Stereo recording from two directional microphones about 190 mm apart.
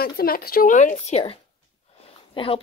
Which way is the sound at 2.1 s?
30° left (ahead or behind).